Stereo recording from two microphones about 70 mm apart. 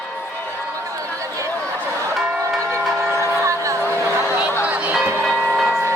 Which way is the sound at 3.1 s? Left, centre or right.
Right.